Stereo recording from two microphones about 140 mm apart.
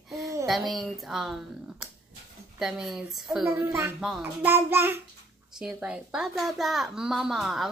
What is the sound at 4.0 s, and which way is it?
A child's voice, 5° right (ahead or behind).